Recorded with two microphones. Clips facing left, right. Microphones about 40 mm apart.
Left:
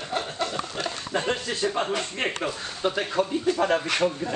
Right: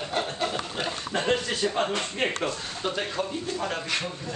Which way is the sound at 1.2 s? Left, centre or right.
Centre.